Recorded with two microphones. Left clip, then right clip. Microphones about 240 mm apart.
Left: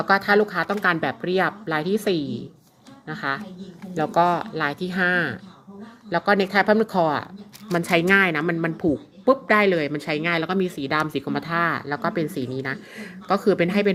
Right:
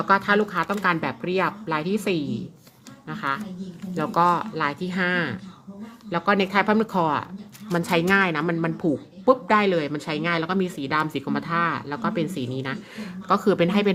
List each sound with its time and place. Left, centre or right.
0.0 s a woman's voice: centre